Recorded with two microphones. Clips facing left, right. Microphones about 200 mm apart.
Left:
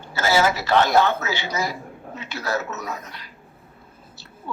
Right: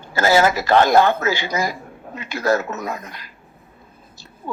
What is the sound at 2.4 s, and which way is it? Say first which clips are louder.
Speech: right 7 dB; 50° right (ahead or behind).